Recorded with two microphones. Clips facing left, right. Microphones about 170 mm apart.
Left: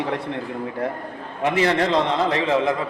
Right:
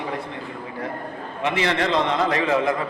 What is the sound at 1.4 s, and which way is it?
Speech, 40° left (ahead or behind).